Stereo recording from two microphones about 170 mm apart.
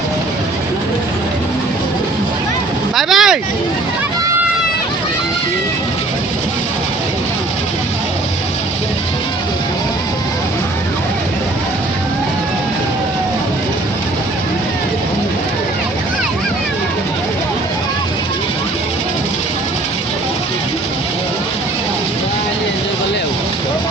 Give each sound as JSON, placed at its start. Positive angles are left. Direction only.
{"t": 2.9, "sound": "vehicle", "side_deg": 0}